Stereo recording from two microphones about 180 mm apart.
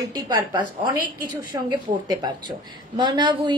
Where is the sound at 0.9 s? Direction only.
50° right (ahead or behind).